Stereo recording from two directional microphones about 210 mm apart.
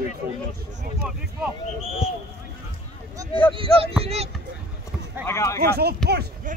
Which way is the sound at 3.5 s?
25° right (ahead or behind).